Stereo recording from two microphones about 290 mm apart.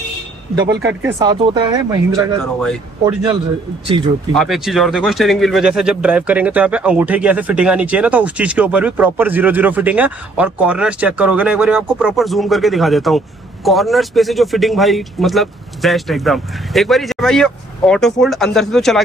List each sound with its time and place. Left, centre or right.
0.8 s speech: centre
2.6 s speech: centre
3.8 s speech: centre
4.4 s speech: centre